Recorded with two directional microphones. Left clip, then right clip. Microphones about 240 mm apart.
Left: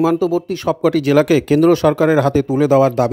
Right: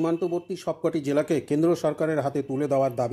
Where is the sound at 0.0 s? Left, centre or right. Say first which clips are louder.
Left 10 dB; left.